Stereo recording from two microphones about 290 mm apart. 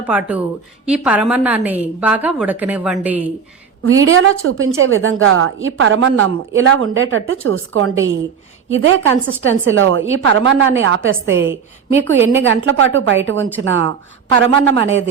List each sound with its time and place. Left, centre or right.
0.0 s a woman's voice: centre
3.8 s a woman's voice: right